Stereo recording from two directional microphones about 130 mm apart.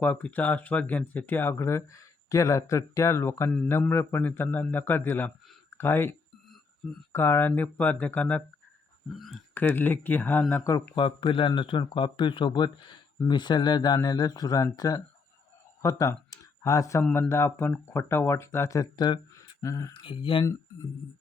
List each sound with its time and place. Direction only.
0.0 s a man's voice: 10° left (ahead or behind)
9.6 s a man's voice: 15° left (ahead or behind)
10.5 s speech: 25° left (ahead or behind)
10.9 s speech: 40° left (ahead or behind)
19.6 s speech: 25° left (ahead or behind)
19.9 s speech: 40° left (ahead or behind)